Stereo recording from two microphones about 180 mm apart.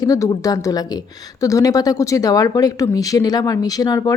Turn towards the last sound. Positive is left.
turn(degrees=20)  # may be behind; listen again after turning